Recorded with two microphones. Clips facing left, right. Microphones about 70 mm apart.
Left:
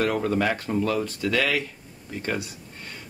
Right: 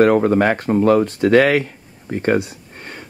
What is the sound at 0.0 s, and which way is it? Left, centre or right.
Speech, right.